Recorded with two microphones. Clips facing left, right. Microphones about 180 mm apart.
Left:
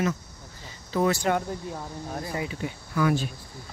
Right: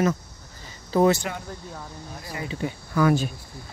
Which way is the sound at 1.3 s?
45° left (ahead or behind).